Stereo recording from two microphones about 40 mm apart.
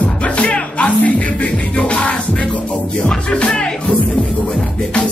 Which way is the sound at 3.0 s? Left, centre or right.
Left.